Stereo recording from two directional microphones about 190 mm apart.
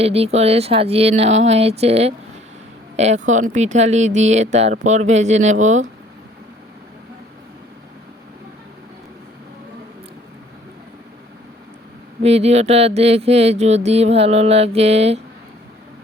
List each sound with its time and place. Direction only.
0.0 s speech: 30° right (ahead or behind)
12.2 s speech: 35° right (ahead or behind)